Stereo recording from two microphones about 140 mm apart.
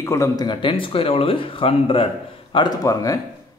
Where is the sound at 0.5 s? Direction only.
35° left (ahead or behind).